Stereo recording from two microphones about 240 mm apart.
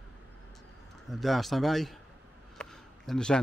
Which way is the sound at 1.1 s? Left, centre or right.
Centre.